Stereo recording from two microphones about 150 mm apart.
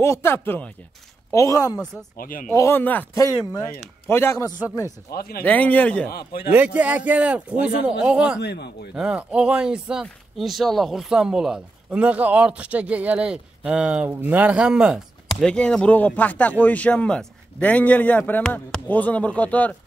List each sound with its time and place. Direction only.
0.0 s a man's voice: 15° left (ahead or behind)
2.1 s speech: 70° left (ahead or behind)
2.5 s a man's voice: 15° left (ahead or behind)
5.1 s a man's voice: 90° left
5.4 s a man's voice: 10° left (ahead or behind)
6.1 s a man's voice: 90° left
6.5 s speech: 10° right (ahead or behind)
8.4 s a man's voice: 90° left
8.9 s speech: 5° right (ahead or behind)
15.4 s a man's voice: 5° left (ahead or behind)